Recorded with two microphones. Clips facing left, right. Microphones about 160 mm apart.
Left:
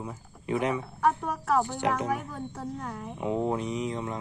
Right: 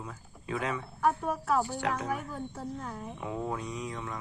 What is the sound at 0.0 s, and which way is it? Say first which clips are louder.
Speech: left 5 dB; 20° left (ahead or behind).